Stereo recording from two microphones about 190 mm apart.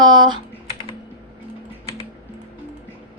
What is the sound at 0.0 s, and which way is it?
Typing, 25° right (ahead or behind).